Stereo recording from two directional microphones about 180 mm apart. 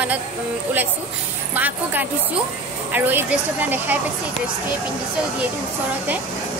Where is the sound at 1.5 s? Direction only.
10° right (ahead or behind).